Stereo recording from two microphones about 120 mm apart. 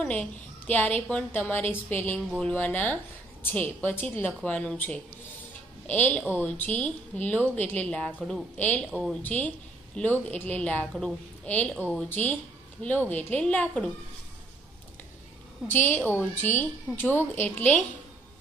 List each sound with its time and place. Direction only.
0.0 s a woman's voice: 10° left (ahead or behind)
2.1 s speech: centre (ahead or behind)
2.5 s a woman's voice: 15° left (ahead or behind)
15.6 s a woman's voice: 15° left (ahead or behind)